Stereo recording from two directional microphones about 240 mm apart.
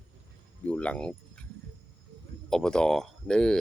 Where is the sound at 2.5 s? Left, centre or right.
Centre.